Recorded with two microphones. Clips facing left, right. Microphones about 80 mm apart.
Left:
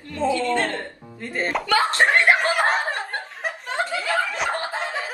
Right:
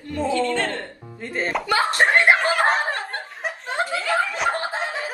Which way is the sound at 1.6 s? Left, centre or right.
Centre.